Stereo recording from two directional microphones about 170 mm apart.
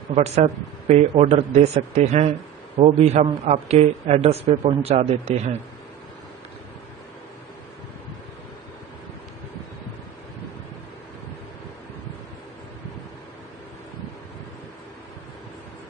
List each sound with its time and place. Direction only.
0.1 s a man's voice: 40° right (ahead or behind)